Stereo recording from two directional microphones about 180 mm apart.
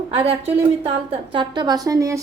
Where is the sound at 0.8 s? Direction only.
30° right (ahead or behind).